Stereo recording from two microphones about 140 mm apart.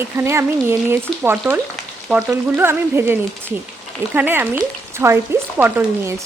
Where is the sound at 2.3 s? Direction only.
15° right (ahead or behind).